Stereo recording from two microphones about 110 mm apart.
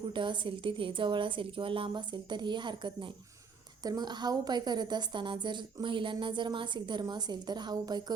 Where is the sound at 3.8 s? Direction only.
35° right (ahead or behind).